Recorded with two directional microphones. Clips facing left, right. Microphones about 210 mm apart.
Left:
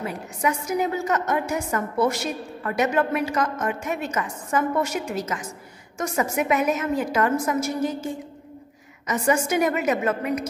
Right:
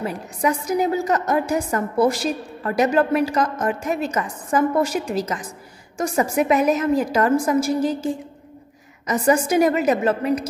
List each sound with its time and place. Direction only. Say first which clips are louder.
0.0 s a woman's voice: right 3 dB; 35° right (ahead or behind)